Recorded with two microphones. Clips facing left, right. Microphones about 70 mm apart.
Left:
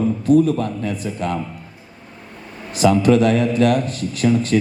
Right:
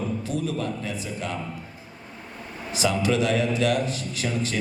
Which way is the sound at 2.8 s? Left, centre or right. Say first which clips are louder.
Left 9 dB; left.